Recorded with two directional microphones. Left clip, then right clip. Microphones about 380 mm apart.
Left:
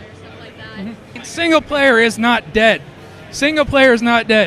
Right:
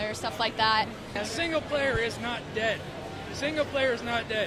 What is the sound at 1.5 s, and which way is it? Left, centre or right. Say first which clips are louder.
Speech: left 17 dB; left.